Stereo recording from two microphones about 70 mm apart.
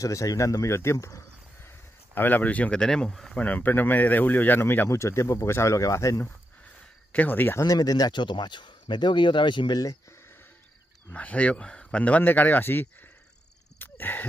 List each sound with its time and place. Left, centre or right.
0.0 s speech: left
2.1 s speech: left
2.8 s speech: centre
3.3 s speech: left
4.9 s speech: left
7.1 s speech: left
7.7 s speech: left
11.1 s speech: centre
13.7 s a sound: left